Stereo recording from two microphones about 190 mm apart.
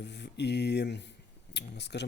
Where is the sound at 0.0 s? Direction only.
65° left (ahead or behind).